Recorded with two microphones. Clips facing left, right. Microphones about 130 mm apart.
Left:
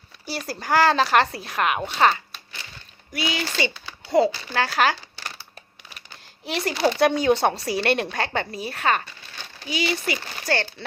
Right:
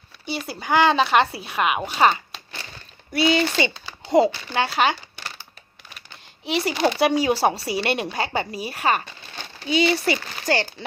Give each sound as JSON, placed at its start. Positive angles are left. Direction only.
{"t": 0.3, "sound": "speech", "side_deg": 0}
{"t": 3.1, "sound": "speech", "side_deg": -30}
{"t": 4.6, "sound": "speech", "side_deg": 0}
{"t": 6.4, "sound": "speech", "side_deg": 0}
{"t": 9.6, "sound": "speech", "side_deg": -30}
{"t": 10.5, "sound": "speech", "side_deg": -15}